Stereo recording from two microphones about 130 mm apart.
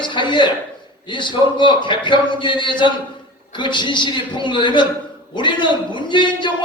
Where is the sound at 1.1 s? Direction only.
35° left (ahead or behind).